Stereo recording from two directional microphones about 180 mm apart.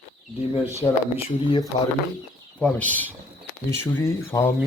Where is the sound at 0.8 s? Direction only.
15° left (ahead or behind).